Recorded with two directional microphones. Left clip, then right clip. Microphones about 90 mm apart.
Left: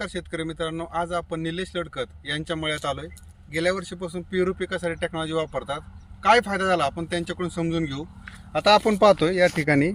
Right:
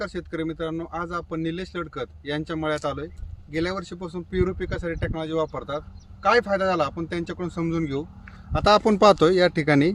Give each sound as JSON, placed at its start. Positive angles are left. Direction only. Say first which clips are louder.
{"t": 0.0, "sound": "speech", "louder": "right 1 dB", "side_deg": -30}
{"t": 8.5, "sound": "speech", "louder": "even", "side_deg": -60}
{"t": 9.6, "sound": "speech", "louder": "right 1 dB", "side_deg": -35}